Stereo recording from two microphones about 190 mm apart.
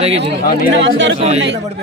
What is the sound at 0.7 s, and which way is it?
Speech, 70° right (ahead or behind).